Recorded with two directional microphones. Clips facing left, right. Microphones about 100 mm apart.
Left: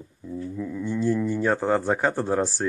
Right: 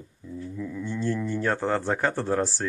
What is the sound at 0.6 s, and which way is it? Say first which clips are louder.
Speech: left 4 dB; 15° left (ahead or behind).